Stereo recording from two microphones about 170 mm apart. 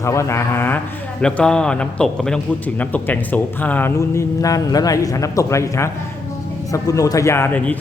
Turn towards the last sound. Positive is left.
turn(degrees=10)  # may be behind; listen again after turning